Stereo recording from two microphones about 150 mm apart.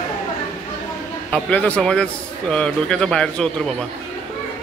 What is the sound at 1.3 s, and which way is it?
A man's voice, 10° left (ahead or behind).